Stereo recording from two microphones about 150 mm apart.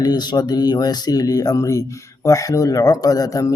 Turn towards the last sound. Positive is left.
turn(degrees=25)  # may be behind; listen again after turning